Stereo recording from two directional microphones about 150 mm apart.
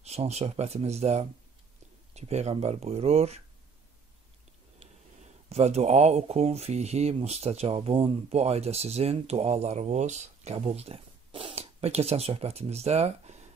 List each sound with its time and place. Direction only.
0.0 s speech: 45° right (ahead or behind)
4.7 s speech: 45° right (ahead or behind)